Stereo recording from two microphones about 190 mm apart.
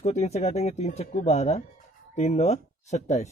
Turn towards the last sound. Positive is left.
turn(degrees=35)  # may be behind; listen again after turning